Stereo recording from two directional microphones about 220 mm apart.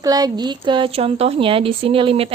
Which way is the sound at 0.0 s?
15° right (ahead or behind).